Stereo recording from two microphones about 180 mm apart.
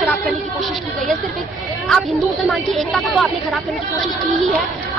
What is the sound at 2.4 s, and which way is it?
Speech, centre (ahead or behind).